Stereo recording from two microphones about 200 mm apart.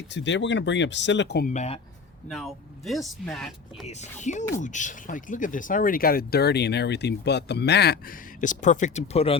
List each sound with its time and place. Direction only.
0.1 s speech: 65° left (ahead or behind)
1.5 s speech: 35° left (ahead or behind)
2.2 s speech: centre (ahead or behind)
3.8 s speech: 35° left (ahead or behind)